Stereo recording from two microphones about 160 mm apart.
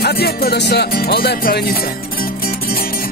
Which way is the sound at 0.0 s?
75° left (ahead or behind).